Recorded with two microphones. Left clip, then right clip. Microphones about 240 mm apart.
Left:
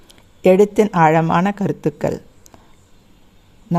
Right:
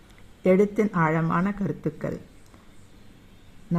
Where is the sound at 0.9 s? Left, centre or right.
Left.